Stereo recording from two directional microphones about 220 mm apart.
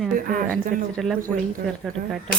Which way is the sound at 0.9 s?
5° left (ahead or behind).